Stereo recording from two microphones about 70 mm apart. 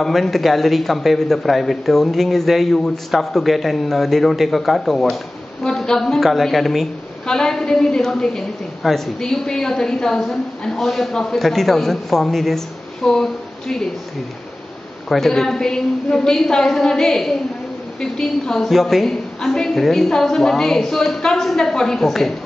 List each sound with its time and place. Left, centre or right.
0.0 s a man's voice: centre
15.0 s a woman's voice: centre